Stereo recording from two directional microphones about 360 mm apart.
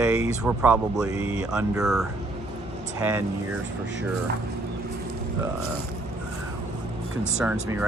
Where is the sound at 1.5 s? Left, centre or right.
Centre.